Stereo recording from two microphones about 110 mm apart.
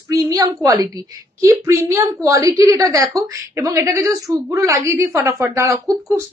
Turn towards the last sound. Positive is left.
turn(degrees=-30)  # may be behind; listen again after turning